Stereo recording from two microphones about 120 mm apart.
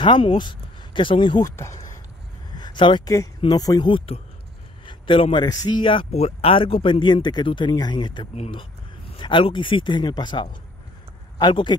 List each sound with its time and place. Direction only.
0.0 s speech: 40° left (ahead or behind)
1.6 s speech: 25° left (ahead or behind)
2.5 s a sound: 40° left (ahead or behind)
3.4 s a man's voice: 30° left (ahead or behind)
3.9 s speech: 50° left (ahead or behind)
4.8 s a sound: 45° left (ahead or behind)
5.5 s a man's voice: 30° left (ahead or behind)
5.8 s a man's voice: 45° left (ahead or behind)